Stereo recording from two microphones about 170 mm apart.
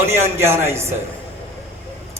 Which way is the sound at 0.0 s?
15° right (ahead or behind).